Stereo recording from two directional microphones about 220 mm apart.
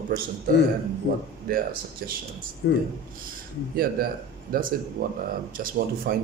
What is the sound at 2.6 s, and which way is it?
Speech, 50° left (ahead or behind).